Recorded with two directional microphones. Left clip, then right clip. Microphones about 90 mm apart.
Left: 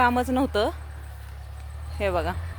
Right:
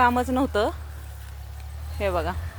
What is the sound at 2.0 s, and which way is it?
Speech, 30° left (ahead or behind).